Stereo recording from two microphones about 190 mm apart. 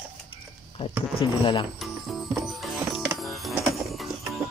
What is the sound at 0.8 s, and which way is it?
Speech, 30° left (ahead or behind).